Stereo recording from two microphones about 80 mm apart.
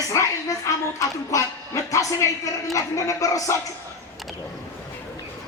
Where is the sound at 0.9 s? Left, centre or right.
Left.